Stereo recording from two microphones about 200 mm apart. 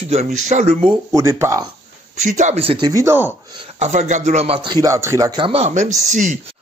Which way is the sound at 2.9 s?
15° right (ahead or behind).